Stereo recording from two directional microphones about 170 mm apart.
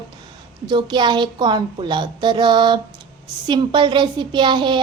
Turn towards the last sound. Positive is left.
turn(degrees=-25)  # may be behind; listen again after turning